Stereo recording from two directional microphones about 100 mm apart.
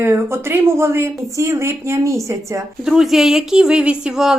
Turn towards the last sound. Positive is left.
turn(degrees=-5)  # may be behind; listen again after turning